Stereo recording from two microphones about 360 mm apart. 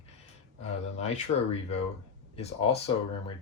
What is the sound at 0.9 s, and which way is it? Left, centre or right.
Speech, centre.